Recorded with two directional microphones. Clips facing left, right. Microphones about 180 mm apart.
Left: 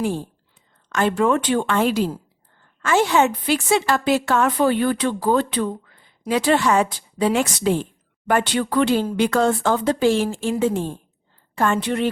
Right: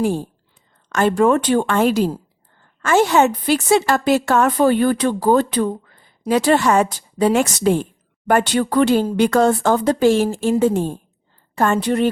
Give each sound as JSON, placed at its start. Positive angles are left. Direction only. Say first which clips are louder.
{"t": 0.9, "sound": "a woman's voice", "louder": "right 4 dB", "side_deg": -45}